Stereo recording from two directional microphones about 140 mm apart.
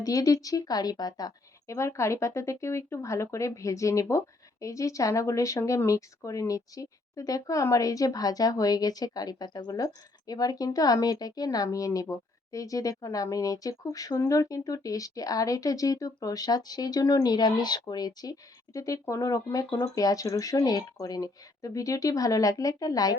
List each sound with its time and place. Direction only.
0.0 s a woman's voice: 25° left (ahead or behind)